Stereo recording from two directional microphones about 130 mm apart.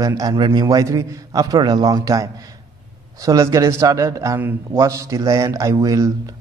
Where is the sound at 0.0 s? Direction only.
25° right (ahead or behind).